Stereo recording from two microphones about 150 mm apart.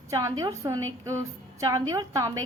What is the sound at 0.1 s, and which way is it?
A woman's voice, 20° right (ahead or behind).